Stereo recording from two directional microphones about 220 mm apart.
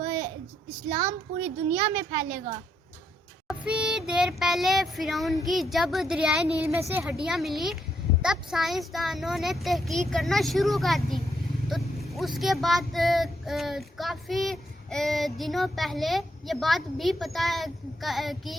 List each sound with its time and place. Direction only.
0.9 s speech: 30° right (ahead or behind)
1.7 s a child's voice: 10° right (ahead or behind)
3.4 s speech: 5° right (ahead or behind)